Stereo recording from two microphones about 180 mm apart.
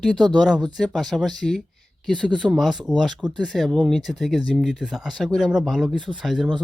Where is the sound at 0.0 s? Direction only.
5° left (ahead or behind).